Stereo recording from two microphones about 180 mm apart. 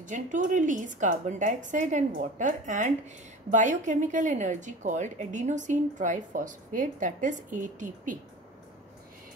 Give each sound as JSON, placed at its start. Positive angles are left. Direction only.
{"t": 0.0, "sound": "a woman's voice", "side_deg": -45}